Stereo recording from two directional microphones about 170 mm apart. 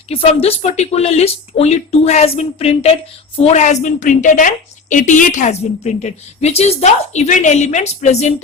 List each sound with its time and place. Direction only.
0.1 s a woman's voice: 35° left (ahead or behind)